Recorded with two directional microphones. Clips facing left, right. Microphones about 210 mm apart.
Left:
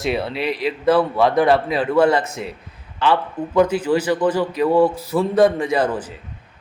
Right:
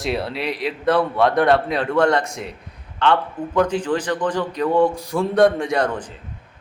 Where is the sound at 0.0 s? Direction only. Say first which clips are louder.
Left 2 dB; centre (ahead or behind).